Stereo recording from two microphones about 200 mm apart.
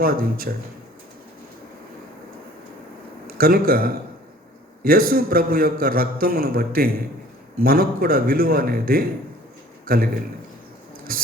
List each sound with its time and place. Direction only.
0.0 s a man's voice: 45° right (ahead or behind)
3.2 s a man's voice: 45° right (ahead or behind)
11.1 s a man's voice: 45° right (ahead or behind)